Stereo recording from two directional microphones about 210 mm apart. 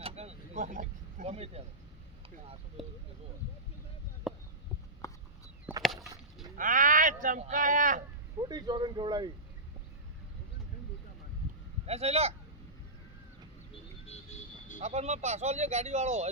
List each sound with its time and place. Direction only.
0.0 s vehicle: 30° right (ahead or behind)
2.8 s speech: centre (ahead or behind)
4.3 s a sound: centre (ahead or behind)
5.0 s a sound: 15° left (ahead or behind)
5.8 s a sound: centre (ahead or behind)
6.6 s speech: 40° right (ahead or behind)
8.4 s speech: 20° right (ahead or behind)
11.9 s speech: 30° right (ahead or behind)
14.1 s vehicle: 35° left (ahead or behind)
14.8 s speech: 30° right (ahead or behind)